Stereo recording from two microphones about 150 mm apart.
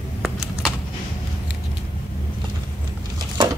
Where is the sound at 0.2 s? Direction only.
5° right (ahead or behind).